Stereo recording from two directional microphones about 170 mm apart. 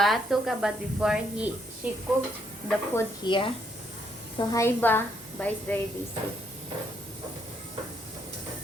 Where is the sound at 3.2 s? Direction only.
30° left (ahead or behind).